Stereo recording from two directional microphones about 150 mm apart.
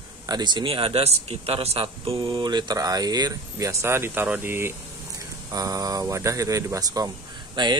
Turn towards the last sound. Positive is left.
turn(degrees=-30)  # may be behind; listen again after turning